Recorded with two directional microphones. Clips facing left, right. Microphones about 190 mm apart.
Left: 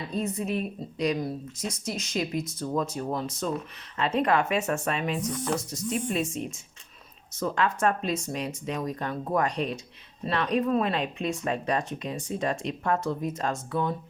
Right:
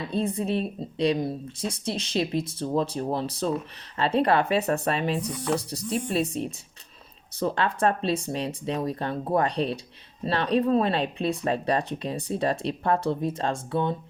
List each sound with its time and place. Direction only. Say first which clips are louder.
0.1 s speech: right 3 dB; 30° right (ahead or behind)